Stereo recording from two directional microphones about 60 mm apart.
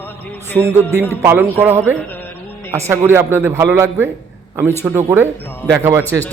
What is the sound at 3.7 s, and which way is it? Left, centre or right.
Music, right.